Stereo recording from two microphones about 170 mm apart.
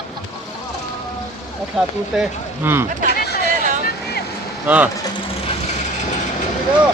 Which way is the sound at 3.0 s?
70° left (ahead or behind).